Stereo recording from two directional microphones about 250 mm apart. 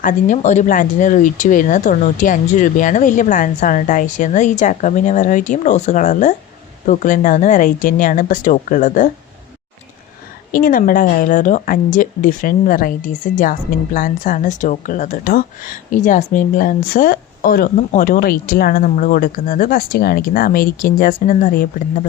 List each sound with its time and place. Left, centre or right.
0.0 s a woman's voice: left
10.5 s a woman's voice: left